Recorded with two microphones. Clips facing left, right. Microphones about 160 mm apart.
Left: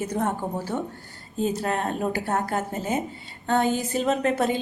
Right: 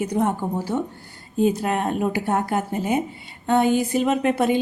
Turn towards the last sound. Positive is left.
turn(degrees=-15)  # may be behind; listen again after turning